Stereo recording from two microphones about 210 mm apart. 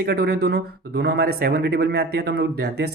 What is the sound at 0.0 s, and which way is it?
Speech, 50° right (ahead or behind).